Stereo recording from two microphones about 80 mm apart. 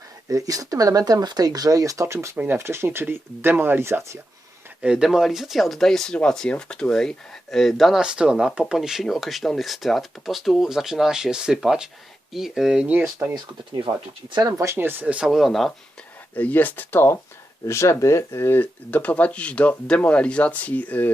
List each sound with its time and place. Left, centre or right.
0.3 s speech: right
4.8 s speech: centre
8.0 s speech: centre
13.0 s speech: right
13.3 s speech: right
14.4 s speech: right
14.8 s speech: right
15.3 s speech: centre
16.3 s speech: left